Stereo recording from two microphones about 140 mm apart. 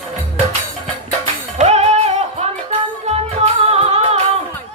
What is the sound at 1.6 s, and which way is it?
Music, 50° right (ahead or behind).